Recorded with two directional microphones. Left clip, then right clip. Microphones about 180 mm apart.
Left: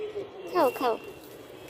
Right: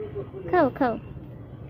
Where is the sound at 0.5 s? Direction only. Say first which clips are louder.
Right 3 dB; 20° right (ahead or behind).